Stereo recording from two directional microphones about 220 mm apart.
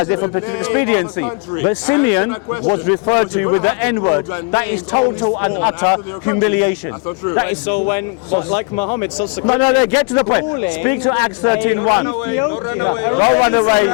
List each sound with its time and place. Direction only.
0.1 s a man's voice: 25° left (ahead or behind)
7.9 s a man's voice: 25° left (ahead or behind)